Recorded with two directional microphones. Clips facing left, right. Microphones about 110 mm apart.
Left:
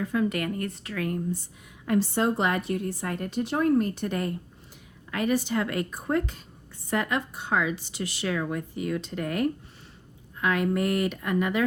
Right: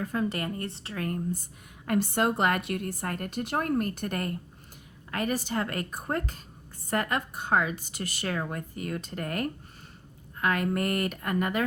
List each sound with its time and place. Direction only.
0.0 s speech: 35° right (ahead or behind)
1.9 s speech: 55° right (ahead or behind)